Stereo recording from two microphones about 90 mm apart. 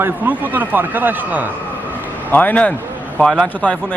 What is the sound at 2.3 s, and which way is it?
Speech, 20° left (ahead or behind).